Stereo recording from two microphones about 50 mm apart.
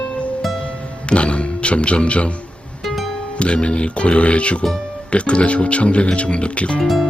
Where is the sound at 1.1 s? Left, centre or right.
Left.